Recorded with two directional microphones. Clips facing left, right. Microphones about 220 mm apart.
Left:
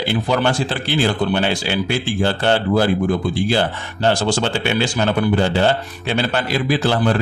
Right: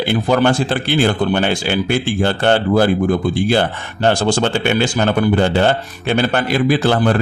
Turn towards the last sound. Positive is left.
turn(degrees=-55)  # may be behind; listen again after turning